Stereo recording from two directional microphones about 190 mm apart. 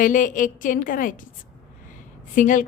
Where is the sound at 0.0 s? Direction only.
45° left (ahead or behind).